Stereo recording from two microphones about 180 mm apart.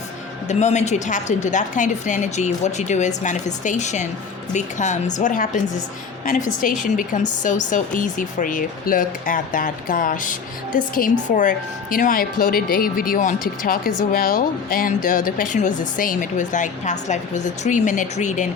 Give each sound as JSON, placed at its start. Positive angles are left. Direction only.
{"t": 0.4, "sound": "a woman's voice", "side_deg": 40}